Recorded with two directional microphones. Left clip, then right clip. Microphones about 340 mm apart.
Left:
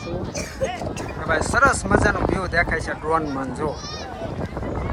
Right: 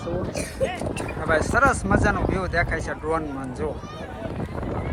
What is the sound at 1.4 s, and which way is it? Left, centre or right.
Speech, centre.